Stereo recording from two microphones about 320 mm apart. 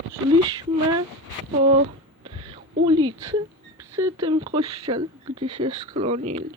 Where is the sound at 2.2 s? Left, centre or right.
Centre.